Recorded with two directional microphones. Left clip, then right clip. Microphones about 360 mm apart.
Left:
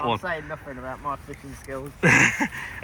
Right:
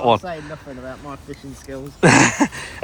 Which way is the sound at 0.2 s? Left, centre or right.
Centre.